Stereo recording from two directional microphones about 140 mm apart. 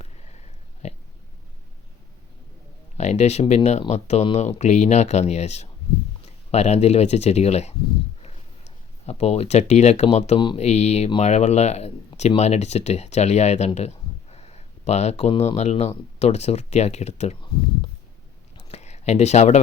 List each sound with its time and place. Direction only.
0.8 s oink: 50° left (ahead or behind)
3.0 s speech: 55° left (ahead or behind)
9.0 s speech: 50° left (ahead or behind)
18.7 s a sound: 50° left (ahead or behind)